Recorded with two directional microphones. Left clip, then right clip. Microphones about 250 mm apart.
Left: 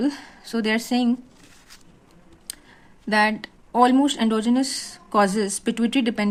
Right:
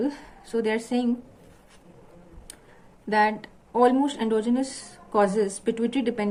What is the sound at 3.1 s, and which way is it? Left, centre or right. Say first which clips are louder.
Speech: left 2 dB; left.